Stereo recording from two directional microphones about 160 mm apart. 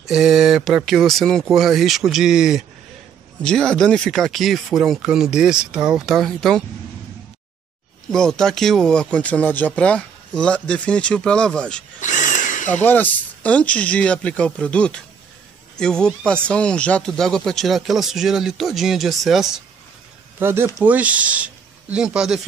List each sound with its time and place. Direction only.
0.0 s speech: centre (ahead or behind)
8.1 s speech: 5° left (ahead or behind)
12.0 s tools: 50° left (ahead or behind)
12.6 s speech: 10° left (ahead or behind)
20.3 s speech: 15° right (ahead or behind)